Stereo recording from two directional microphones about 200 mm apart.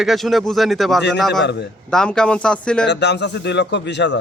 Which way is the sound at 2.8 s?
60° left (ahead or behind).